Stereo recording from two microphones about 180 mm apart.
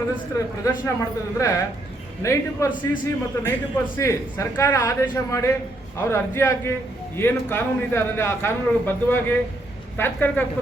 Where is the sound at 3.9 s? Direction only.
15° left (ahead or behind).